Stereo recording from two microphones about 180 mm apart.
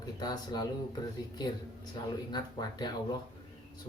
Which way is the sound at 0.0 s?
25° left (ahead or behind).